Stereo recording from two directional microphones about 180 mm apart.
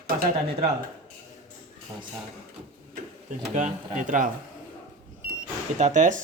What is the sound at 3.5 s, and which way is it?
Speech, 45° right (ahead or behind).